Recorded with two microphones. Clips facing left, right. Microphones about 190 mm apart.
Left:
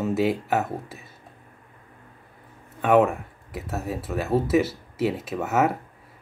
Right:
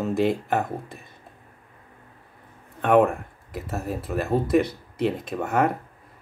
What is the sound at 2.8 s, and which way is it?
Speech, 5° left (ahead or behind).